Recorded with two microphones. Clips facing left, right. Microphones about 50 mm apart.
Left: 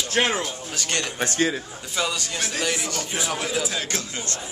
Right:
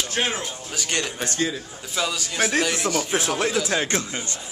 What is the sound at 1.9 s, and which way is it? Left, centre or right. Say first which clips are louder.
Speech: right 2 dB; centre.